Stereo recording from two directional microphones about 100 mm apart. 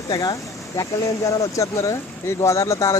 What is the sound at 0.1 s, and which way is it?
Speech, 40° left (ahead or behind).